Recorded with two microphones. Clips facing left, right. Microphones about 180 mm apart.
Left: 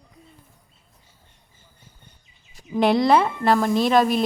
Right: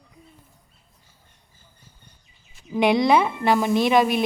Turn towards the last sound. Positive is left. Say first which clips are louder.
# even
turn(degrees=0)  # may be behind; listen again after turning